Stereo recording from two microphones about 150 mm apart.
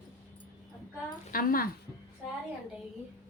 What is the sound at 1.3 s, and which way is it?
Speech, 75° left (ahead or behind).